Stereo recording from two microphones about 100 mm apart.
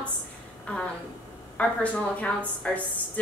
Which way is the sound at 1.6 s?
15° left (ahead or behind).